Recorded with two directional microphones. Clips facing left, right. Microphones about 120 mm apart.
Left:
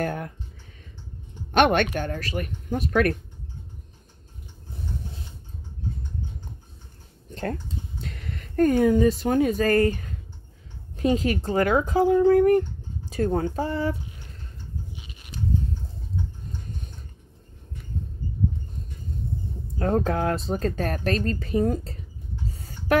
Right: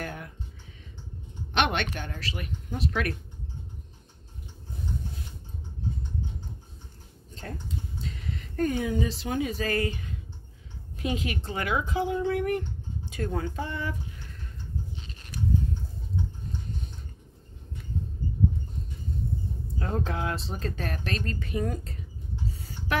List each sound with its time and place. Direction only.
0.0 s speech: 45° left (ahead or behind)
1.5 s speech: 45° left (ahead or behind)
8.0 s speech: 60° left (ahead or behind); by 13.9 s 35° left (ahead or behind)
15.0 s a sound: 10° left (ahead or behind)
19.8 s speech: 45° left (ahead or behind)
22.6 s a sound: 45° left (ahead or behind)